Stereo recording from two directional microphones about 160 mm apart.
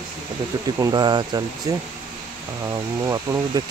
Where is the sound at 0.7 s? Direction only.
20° right (ahead or behind).